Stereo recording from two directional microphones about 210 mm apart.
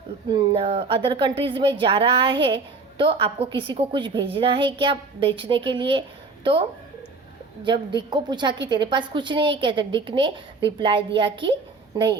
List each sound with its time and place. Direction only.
0.3 s a woman's voice: 25° right (ahead or behind)